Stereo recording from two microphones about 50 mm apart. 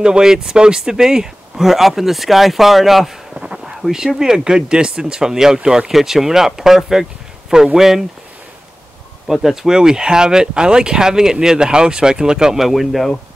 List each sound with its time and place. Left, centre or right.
0.0 s speech: centre
3.3 s a sound: centre
3.8 s speech: centre
9.3 s speech: centre
12.6 s speech: centre